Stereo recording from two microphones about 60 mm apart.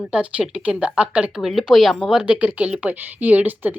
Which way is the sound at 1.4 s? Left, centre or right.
Centre.